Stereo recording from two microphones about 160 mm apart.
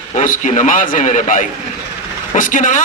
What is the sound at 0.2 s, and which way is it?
A man's voice, 50° left (ahead or behind).